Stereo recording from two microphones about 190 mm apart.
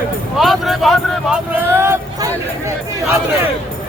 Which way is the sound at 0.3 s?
Centre (ahead or behind).